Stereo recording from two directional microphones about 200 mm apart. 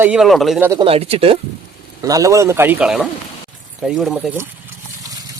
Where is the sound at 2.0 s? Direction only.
15° right (ahead or behind).